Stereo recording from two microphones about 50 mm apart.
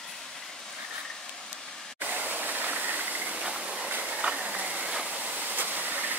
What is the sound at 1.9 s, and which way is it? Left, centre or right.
Waterfall, right.